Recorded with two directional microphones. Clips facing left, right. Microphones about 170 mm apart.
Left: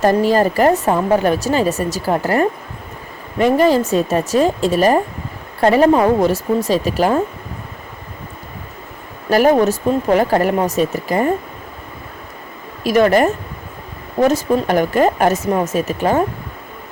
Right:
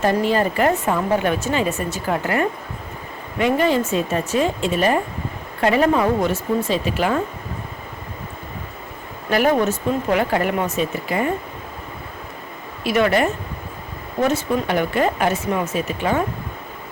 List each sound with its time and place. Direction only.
0.0 s a woman's voice: 40° left (ahead or behind)
9.3 s a woman's voice: 40° left (ahead or behind)
12.8 s a woman's voice: 40° left (ahead or behind)